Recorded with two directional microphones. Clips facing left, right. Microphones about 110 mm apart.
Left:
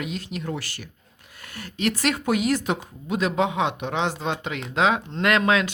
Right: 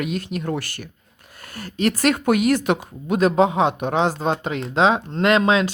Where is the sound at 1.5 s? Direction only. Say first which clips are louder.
Right 4 dB; 40° right (ahead or behind).